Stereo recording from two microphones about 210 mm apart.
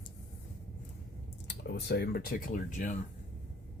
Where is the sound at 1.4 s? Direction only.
55° left (ahead or behind).